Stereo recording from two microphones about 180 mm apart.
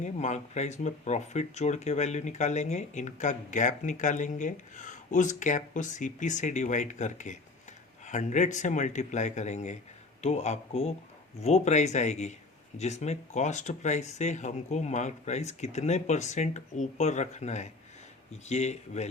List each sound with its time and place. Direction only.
0.0 s speech: 40° left (ahead or behind)